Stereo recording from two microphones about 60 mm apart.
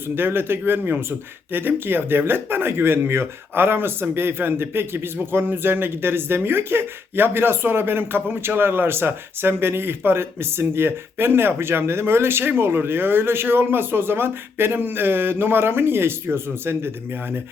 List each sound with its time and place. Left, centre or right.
0.2 s speech: right